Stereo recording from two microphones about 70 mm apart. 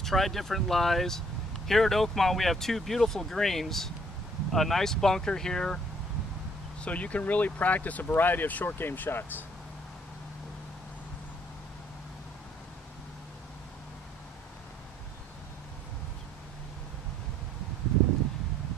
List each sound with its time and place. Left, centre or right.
0.0 s speech: centre
6.8 s speech: centre